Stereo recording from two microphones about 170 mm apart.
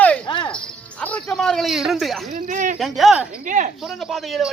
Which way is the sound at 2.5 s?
50° right (ahead or behind).